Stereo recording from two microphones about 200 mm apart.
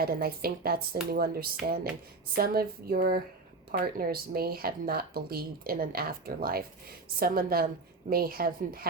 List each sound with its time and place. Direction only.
0.0 s speech: 50° right (ahead or behind)